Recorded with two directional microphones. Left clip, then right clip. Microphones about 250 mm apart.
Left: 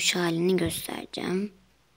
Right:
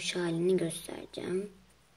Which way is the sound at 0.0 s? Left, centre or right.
Left.